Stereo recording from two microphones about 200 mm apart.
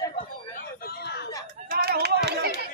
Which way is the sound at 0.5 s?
50° left (ahead or behind).